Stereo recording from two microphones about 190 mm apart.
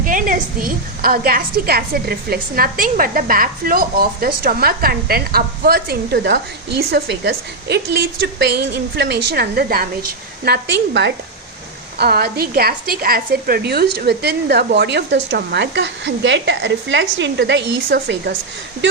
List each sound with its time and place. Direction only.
0.0 s a woman's voice: 45° right (ahead or behind); by 18.3 s 60° right (ahead or behind)